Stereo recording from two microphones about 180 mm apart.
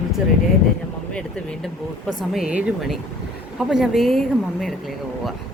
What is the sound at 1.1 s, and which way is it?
Speech, 5° left (ahead or behind).